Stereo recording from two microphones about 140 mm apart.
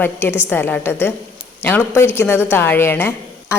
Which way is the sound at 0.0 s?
15° left (ahead or behind).